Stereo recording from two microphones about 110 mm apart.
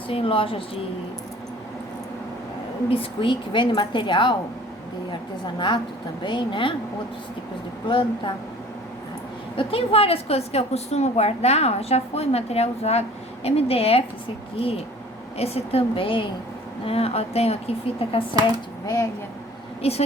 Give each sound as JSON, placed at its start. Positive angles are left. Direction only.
{"t": 0.1, "sound": "a woman's voice", "side_deg": 55}
{"t": 2.9, "sound": "a woman's voice", "side_deg": 55}
{"t": 5.5, "sound": "a woman's voice", "side_deg": 45}
{"t": 7.9, "sound": "a woman's voice", "side_deg": 45}
{"t": 9.6, "sound": "a woman's voice", "side_deg": 60}
{"t": 19.8, "sound": "a woman's voice", "side_deg": 65}